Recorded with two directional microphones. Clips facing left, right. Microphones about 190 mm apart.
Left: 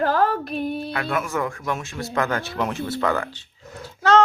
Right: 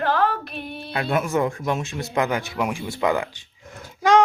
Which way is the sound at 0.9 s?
20° right (ahead or behind).